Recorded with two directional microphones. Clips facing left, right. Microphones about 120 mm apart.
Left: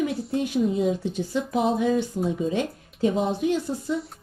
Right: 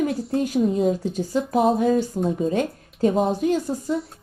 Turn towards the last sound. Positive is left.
turn(degrees=-40)  # may be behind; listen again after turning